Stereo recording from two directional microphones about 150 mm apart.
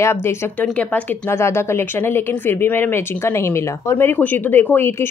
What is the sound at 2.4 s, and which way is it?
Speech, 15° left (ahead or behind).